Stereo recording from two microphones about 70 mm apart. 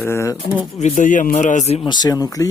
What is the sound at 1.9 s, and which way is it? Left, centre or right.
Speech, left.